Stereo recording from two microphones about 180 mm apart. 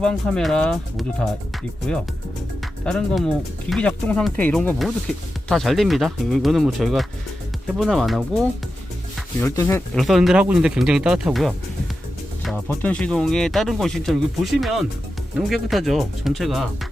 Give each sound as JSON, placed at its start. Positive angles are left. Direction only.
{"t": 0.0, "sound": "speech", "side_deg": 5}
{"t": 2.8, "sound": "speech", "side_deg": 5}
{"t": 9.4, "sound": "speech", "side_deg": 15}
{"t": 9.9, "sound": "speech", "side_deg": 0}
{"t": 12.6, "sound": "speech", "side_deg": 10}